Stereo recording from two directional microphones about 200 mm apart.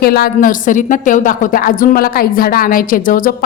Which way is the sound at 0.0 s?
50° left (ahead or behind).